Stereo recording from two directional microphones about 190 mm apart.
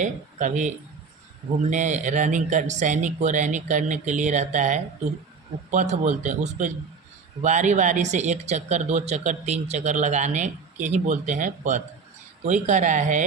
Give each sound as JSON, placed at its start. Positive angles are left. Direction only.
{"t": 0.0, "sound": "speech", "side_deg": -40}
{"t": 1.7, "sound": "speech", "side_deg": -40}